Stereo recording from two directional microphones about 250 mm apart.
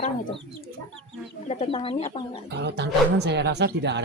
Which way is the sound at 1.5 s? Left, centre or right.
Left.